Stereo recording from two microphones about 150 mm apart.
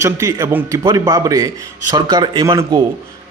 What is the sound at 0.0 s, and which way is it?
A man's voice, 20° right (ahead or behind).